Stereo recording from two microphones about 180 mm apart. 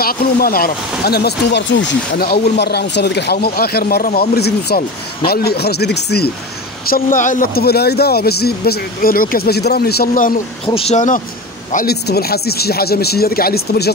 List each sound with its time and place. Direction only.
0.0 s speech: 55° left (ahead or behind)
6.9 s speech: 45° left (ahead or behind)
10.7 s speech: 35° left (ahead or behind)
11.7 s speech: 60° left (ahead or behind)